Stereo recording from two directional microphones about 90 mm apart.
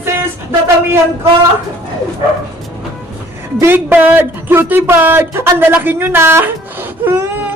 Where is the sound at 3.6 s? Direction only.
25° right (ahead or behind).